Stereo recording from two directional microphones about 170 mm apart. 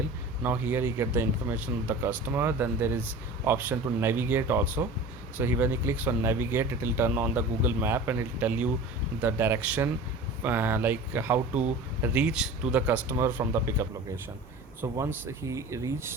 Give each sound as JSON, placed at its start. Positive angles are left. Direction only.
{"t": 0.4, "sound": "speech", "side_deg": -10}